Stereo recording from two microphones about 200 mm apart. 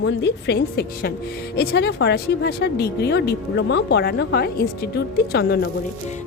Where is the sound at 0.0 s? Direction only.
65° left (ahead or behind).